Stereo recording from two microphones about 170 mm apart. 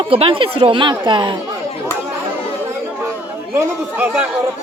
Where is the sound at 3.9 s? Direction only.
10° right (ahead or behind).